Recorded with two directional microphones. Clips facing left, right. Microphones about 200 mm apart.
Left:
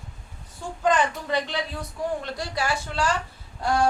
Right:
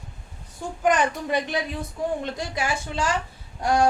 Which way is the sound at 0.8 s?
15° right (ahead or behind).